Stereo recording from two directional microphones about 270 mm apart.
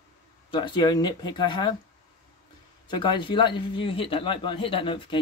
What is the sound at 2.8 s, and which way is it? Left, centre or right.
A man's voice, centre.